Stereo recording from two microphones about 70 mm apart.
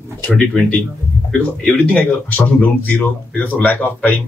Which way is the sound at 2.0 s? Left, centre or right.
Left.